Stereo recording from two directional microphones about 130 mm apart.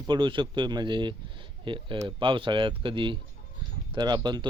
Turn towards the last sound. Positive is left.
turn(degrees=-35)  # may be behind; listen again after turning